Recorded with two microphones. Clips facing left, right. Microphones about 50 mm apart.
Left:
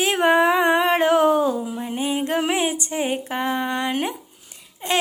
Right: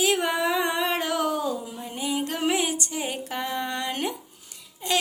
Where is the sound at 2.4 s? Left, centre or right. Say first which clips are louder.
Left 3 dB; left.